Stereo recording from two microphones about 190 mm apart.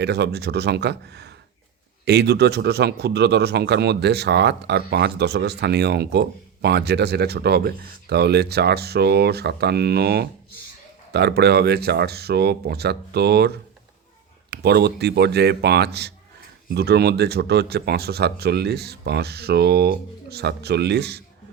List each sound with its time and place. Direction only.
0.0 s a man's voice: 60° right (ahead or behind)